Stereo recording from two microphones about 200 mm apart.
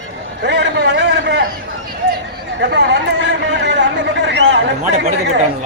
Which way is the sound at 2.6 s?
60° right (ahead or behind).